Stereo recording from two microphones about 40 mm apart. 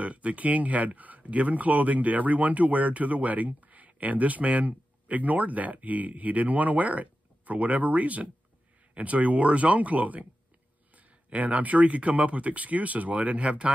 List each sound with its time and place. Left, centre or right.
0.0 s speech: right